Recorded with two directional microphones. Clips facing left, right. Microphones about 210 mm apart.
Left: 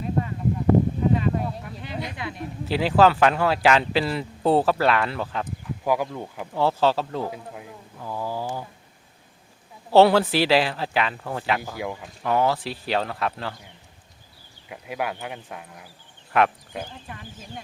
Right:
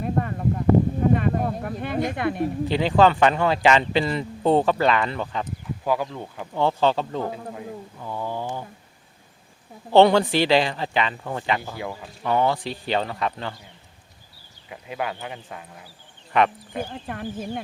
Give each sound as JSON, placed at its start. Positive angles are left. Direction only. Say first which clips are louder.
{"t": 0.0, "sound": "a sound", "louder": "right 1 dB", "side_deg": -55}
{"t": 2.6, "sound": "speech", "louder": "left 1 dB", "side_deg": 5}
{"t": 9.9, "sound": "speech", "louder": "even", "side_deg": 5}
{"t": 14.7, "sound": "speech", "louder": "even", "side_deg": 10}
{"t": 16.9, "sound": "speech", "louder": "right 9 dB", "side_deg": -55}